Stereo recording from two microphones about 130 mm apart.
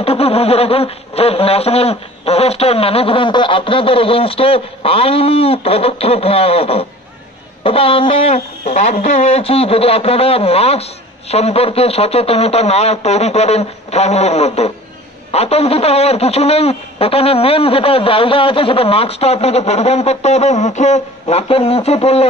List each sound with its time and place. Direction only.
0.0 s speech: 50° left (ahead or behind)